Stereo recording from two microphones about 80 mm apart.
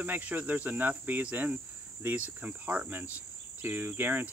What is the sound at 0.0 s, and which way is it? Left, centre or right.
Cricket, right.